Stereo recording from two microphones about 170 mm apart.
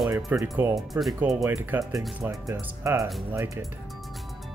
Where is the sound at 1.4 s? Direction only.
15° right (ahead or behind).